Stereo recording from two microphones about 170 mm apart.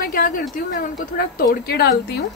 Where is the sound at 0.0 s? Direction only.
55° left (ahead or behind).